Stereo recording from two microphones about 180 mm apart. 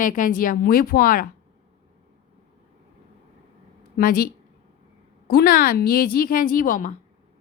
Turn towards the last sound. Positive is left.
turn(degrees=45)  # may be behind; listen again after turning